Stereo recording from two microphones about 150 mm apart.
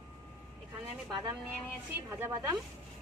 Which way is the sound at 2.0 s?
20° right (ahead or behind).